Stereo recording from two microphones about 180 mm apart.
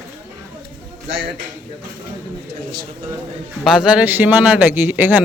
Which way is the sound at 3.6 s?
5° right (ahead or behind).